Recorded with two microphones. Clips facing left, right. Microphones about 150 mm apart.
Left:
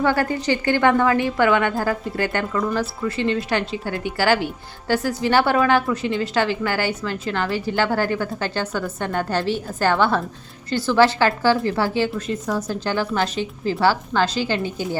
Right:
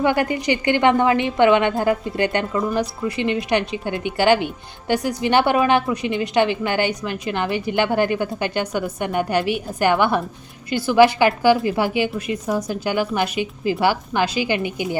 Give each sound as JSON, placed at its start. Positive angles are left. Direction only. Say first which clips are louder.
{"t": 0.0, "sound": "a woman's voice", "louder": "right 1 dB", "side_deg": -15}